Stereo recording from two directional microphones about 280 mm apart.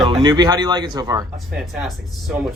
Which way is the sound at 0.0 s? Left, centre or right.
Centre.